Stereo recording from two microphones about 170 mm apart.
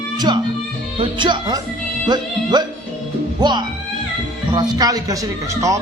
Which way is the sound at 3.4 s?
25° right (ahead or behind).